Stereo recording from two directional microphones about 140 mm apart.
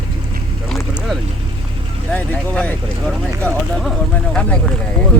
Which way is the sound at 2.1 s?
10° left (ahead or behind).